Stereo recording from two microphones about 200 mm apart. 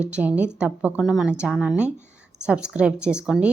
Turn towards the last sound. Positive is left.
turn(degrees=-5)  # may be behind; listen again after turning